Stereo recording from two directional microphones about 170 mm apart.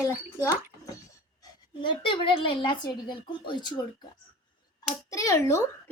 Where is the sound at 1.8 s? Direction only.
30° left (ahead or behind).